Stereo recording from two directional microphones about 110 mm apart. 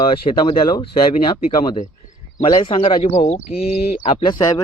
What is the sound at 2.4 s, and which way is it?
Speech, 40° left (ahead or behind).